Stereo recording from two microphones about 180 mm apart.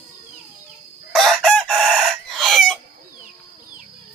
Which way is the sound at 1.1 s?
Centre (ahead or behind).